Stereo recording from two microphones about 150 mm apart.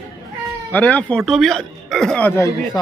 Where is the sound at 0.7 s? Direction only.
10° left (ahead or behind).